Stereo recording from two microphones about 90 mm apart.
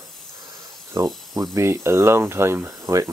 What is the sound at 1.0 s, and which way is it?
Speech, 40° right (ahead or behind).